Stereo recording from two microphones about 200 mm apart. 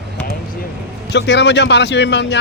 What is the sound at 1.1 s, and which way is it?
Speech, 60° left (ahead or behind).